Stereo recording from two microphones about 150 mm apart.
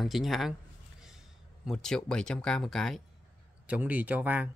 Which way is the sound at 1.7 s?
5° left (ahead or behind).